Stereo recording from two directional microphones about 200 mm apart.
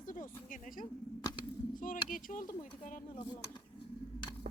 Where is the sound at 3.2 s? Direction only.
20° left (ahead or behind).